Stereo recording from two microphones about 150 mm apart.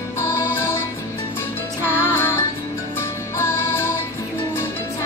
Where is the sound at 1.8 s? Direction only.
15° left (ahead or behind).